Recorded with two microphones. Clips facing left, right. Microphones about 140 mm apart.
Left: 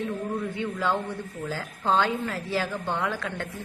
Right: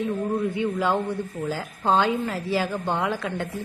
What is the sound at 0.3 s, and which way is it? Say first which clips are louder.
A woman's voice: right 5 dB; 15° right (ahead or behind).